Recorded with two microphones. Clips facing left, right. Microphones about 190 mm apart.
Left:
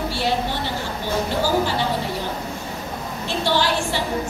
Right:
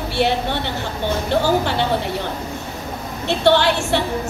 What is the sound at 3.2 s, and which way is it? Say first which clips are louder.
Speech: right 6 dB; 65° right (ahead or behind).